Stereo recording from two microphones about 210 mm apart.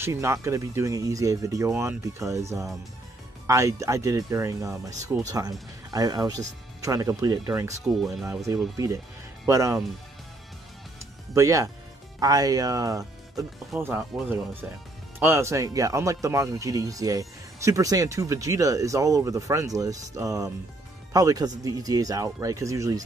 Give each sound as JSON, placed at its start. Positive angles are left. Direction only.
{"t": 0.0, "sound": "speech", "side_deg": -15}
{"t": 7.8, "sound": "speech", "side_deg": 0}
{"t": 9.5, "sound": "speech", "side_deg": -15}
{"t": 11.3, "sound": "speech", "side_deg": -15}